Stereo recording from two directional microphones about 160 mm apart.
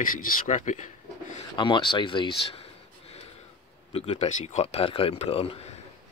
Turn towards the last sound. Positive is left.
turn(degrees=40)  # may be behind; listen again after turning